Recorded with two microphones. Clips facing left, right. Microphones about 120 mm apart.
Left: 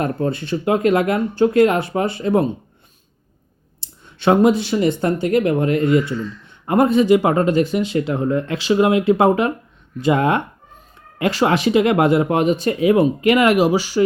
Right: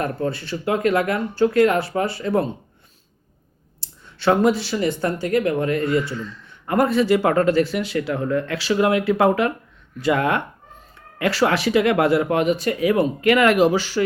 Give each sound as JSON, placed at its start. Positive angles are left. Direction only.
{"t": 0.0, "sound": "a man's voice", "side_deg": 20}
{"t": 3.8, "sound": "a man's voice", "side_deg": 20}